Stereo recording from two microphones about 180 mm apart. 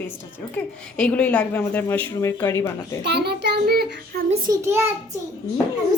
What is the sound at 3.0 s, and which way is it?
A child's voice, 65° right (ahead or behind).